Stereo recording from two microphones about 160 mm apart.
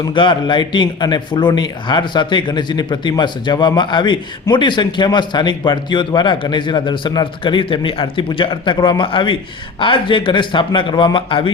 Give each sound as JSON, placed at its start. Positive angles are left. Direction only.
{"t": 0.0, "sound": "a man's voice", "side_deg": 30}